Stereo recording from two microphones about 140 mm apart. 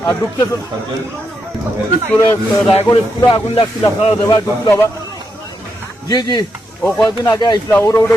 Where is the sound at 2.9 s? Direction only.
40° left (ahead or behind).